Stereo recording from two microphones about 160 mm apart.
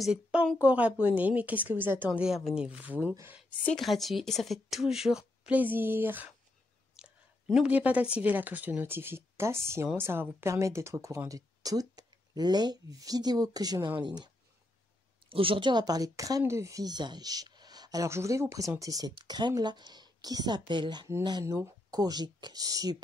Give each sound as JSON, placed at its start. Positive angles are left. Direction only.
{"t": 0.0, "sound": "speech", "side_deg": -5}
{"t": 3.4, "sound": "a woman's voice", "side_deg": 5}